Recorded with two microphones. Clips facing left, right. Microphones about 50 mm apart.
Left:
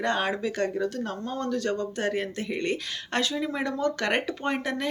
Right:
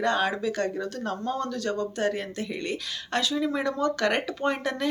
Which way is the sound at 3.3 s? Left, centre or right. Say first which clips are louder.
Right 2 dB; centre.